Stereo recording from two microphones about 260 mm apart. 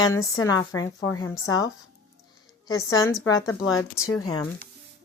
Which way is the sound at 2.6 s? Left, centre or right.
Centre.